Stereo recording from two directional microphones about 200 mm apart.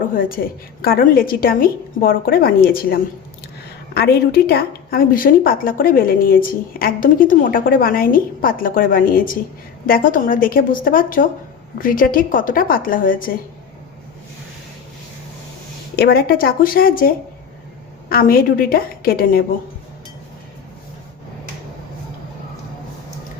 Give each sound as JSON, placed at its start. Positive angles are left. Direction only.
{"t": 0.1, "sound": "a woman's voice", "side_deg": 45}
{"t": 16.0, "sound": "a woman's voice", "side_deg": 50}